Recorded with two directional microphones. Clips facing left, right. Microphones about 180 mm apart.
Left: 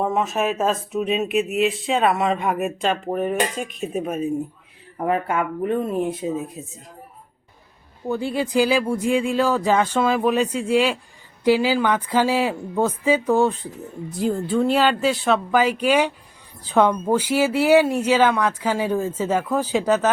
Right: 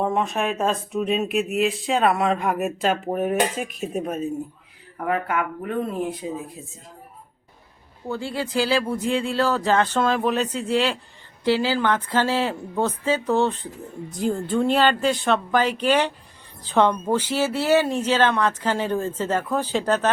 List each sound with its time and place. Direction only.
0.0 s speech: centre (ahead or behind)
4.9 s speech: 25° left (ahead or behind)
8.0 s speech: 15° left (ahead or behind)